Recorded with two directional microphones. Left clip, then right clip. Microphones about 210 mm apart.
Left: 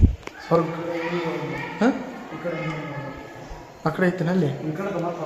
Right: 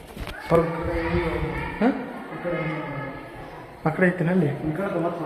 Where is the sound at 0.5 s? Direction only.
10° left (ahead or behind).